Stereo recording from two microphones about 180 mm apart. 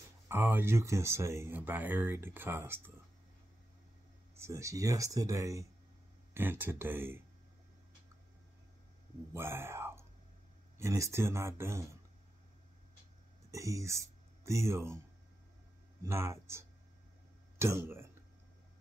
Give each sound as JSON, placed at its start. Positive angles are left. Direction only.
{"t": 0.3, "sound": "speech", "side_deg": -10}
{"t": 4.4, "sound": "speech", "side_deg": -15}
{"t": 9.3, "sound": "speech", "side_deg": -15}
{"t": 13.5, "sound": "speech", "side_deg": -15}
{"t": 16.0, "sound": "speech", "side_deg": -15}